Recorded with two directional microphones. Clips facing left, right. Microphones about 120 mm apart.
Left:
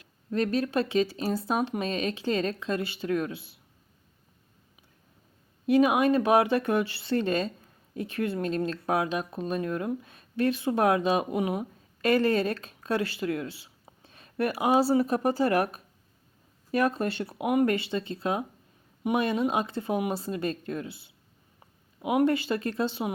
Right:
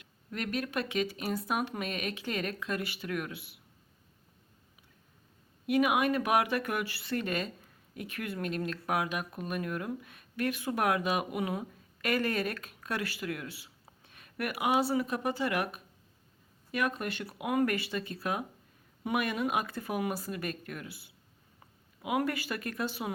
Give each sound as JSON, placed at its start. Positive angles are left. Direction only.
{"t": 0.0, "sound": "speech", "side_deg": 30}
{"t": 5.6, "sound": "speech", "side_deg": 30}